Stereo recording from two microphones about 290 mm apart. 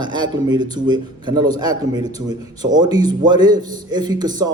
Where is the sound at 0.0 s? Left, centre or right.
Centre.